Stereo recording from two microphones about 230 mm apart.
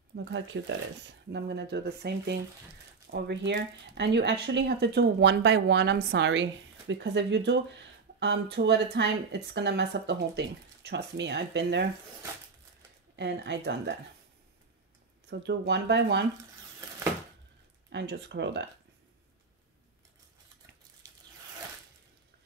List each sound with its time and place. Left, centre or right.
0.1 s speech: right
13.1 s speech: right
15.2 s speech: right
17.8 s speech: right